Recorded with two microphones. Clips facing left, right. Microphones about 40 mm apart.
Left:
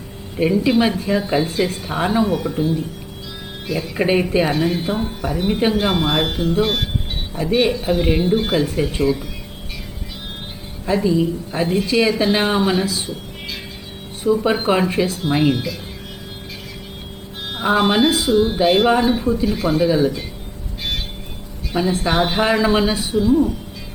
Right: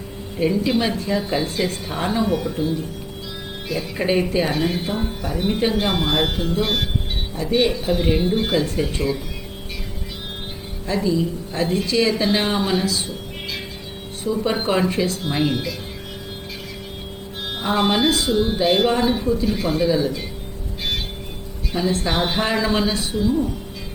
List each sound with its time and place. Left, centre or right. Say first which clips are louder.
0.3 s speech: left 3 dB; centre
3.9 s speech: left 3 dB; centre
4.4 s speech: left 3 dB; centre
10.8 s speech: left 4 dB; centre
14.3 s speech: left 4 dB; centre
17.4 s music: left 3 dB; centre
17.7 s speech: left 3 dB; centre
21.7 s speech: left 3 dB; centre